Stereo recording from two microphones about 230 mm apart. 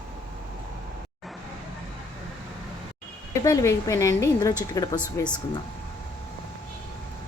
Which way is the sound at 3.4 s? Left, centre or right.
Centre.